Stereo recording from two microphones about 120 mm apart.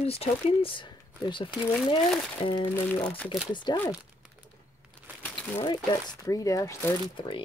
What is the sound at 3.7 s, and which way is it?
Speech, 35° left (ahead or behind).